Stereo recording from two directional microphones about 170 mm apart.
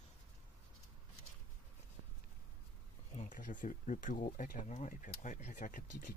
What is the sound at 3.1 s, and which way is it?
Speech, 50° left (ahead or behind).